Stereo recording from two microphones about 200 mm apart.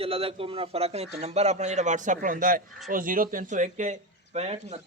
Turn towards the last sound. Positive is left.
turn(degrees=-30)  # may be behind; listen again after turning